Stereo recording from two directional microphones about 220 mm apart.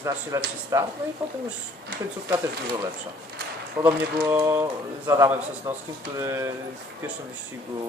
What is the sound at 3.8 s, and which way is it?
Speech, 15° right (ahead or behind).